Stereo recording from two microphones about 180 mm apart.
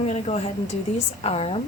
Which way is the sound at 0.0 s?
35° left (ahead or behind).